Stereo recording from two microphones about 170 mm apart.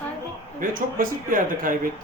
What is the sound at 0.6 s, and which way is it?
A man's voice, 55° right (ahead or behind).